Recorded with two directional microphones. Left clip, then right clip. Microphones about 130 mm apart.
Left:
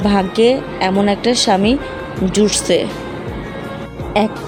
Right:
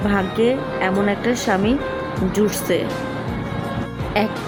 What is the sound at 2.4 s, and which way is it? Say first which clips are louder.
Speech: left 6 dB; 35° left (ahead or behind).